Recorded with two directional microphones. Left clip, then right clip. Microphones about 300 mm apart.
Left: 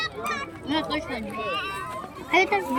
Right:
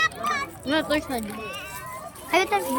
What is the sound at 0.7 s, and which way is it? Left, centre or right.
Speech, centre.